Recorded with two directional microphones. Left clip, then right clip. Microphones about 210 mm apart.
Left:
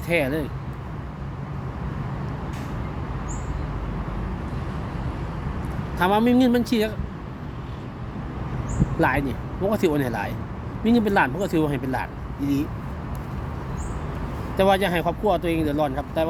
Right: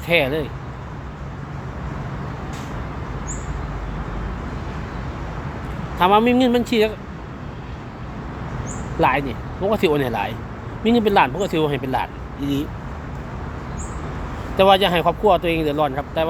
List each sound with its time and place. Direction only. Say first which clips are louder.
0.1 s speech: right 5 dB; 5° left (ahead or behind)
6.0 s speech: right 5 dB; 10° left (ahead or behind)
9.0 s speech: right 4 dB; 10° left (ahead or behind)
12.4 s speech: right 1 dB; 20° left (ahead or behind)
14.5 s speech: right 5 dB; centre (ahead or behind)